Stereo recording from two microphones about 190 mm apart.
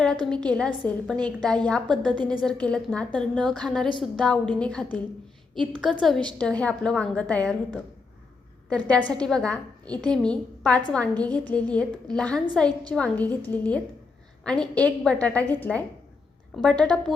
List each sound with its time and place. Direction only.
0.3 s a woman's voice: 5° left (ahead or behind)
8.9 s a woman's voice: 5° left (ahead or behind)